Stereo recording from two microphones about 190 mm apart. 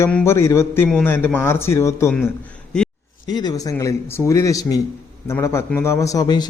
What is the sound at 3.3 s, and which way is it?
A man's voice, 20° left (ahead or behind).